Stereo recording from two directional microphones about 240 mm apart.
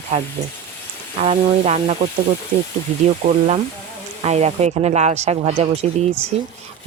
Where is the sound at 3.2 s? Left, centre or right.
Right.